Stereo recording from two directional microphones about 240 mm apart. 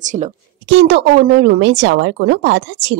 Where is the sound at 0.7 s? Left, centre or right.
Right.